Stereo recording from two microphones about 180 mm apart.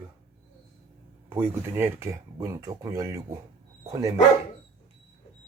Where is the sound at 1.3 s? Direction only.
15° right (ahead or behind).